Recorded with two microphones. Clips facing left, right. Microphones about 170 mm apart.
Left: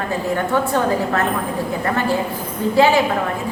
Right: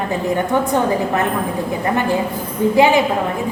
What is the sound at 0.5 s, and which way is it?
Speech, 15° right (ahead or behind).